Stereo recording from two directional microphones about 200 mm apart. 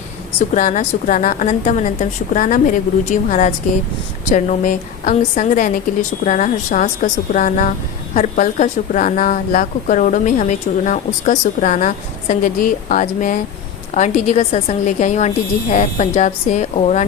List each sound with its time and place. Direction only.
0.5 s a woman's voice: 40° left (ahead or behind)